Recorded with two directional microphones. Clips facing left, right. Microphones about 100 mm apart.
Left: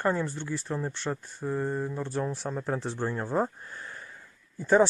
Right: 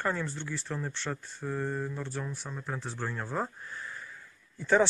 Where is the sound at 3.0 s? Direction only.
20° left (ahead or behind).